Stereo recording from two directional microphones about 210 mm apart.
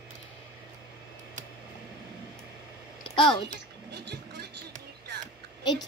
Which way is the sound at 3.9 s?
50° right (ahead or behind).